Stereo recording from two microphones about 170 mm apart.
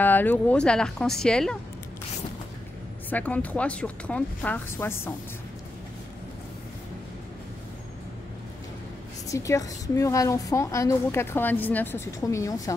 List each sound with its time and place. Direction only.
0.0 s a woman's voice: 10° left (ahead or behind)
3.1 s a woman's voice: 10° left (ahead or behind)
9.3 s a woman's voice: 20° left (ahead or behind)